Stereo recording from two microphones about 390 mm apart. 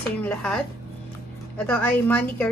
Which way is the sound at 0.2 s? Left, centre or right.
Centre.